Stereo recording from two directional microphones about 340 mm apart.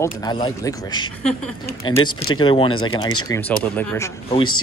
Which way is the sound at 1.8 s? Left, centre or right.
Centre.